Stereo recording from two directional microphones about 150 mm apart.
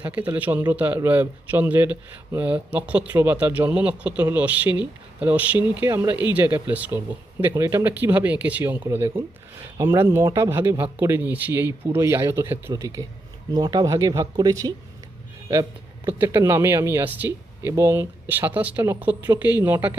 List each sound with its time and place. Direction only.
0.0 s speech: 10° right (ahead or behind)
5.5 s speech: 30° left (ahead or behind)
5.8 s speech: 15° right (ahead or behind)
16.0 s speech: 15° right (ahead or behind)